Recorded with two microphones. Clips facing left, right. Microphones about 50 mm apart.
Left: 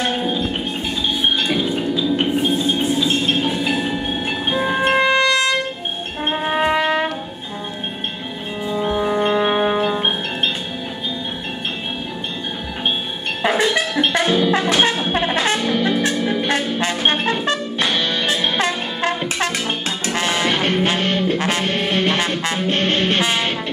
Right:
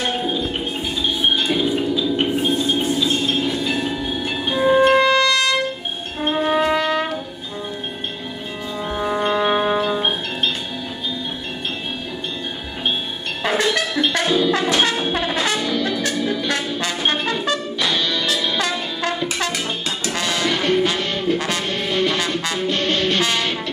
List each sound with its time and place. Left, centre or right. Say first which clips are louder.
0.0 s music: left 1 dB; centre
1.6 s music: even; centre
3.8 s tubular bells: left 1 dB; left
4.5 s music: right 4 dB; centre
5.1 s trumpet: left 1 dB; left
6.3 s brass instrument: even; centre
8.7 s music: left 3 dB; centre
13.4 s music: left 2 dB; centre
15.0 s brass instrument: left 2 dB; left
16.7 s music: left 2 dB; left